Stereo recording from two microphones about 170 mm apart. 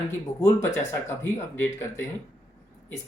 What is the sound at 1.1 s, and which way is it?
Speech, 15° left (ahead or behind).